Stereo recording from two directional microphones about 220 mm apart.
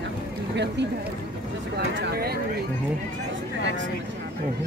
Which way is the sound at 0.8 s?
50° right (ahead or behind).